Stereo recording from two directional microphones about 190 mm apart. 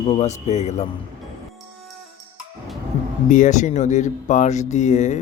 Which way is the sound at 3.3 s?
40° left (ahead or behind).